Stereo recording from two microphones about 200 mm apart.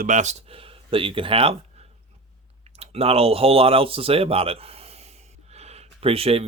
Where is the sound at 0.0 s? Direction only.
40° right (ahead or behind).